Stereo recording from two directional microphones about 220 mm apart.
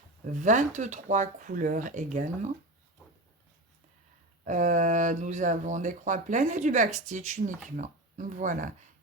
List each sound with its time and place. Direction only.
0.3 s speech: 35° right (ahead or behind)
4.4 s speech: 35° right (ahead or behind)